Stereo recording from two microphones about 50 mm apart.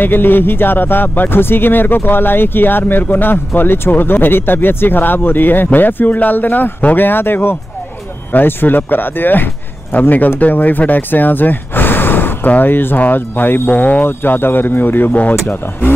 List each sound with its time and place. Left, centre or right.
0.0 s speech: left
14.0 s speech: left